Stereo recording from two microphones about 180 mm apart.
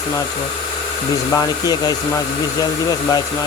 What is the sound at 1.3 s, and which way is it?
Speech, 20° left (ahead or behind).